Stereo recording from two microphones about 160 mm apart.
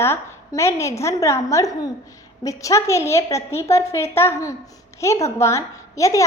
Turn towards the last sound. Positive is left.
turn(degrees=20)  # may be behind; listen again after turning